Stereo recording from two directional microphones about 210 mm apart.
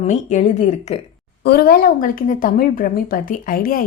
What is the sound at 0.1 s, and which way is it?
Speech, 35° left (ahead or behind).